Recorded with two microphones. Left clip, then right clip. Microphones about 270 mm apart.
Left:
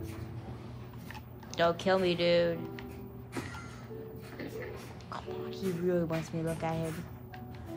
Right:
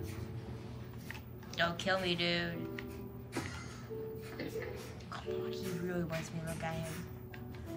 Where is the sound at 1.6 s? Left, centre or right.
Centre.